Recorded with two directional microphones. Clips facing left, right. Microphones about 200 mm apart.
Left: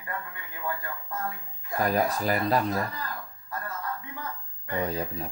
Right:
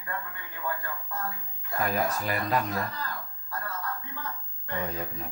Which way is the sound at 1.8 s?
35° left (ahead or behind).